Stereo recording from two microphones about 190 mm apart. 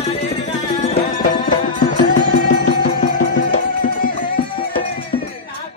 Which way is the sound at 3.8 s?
45° left (ahead or behind).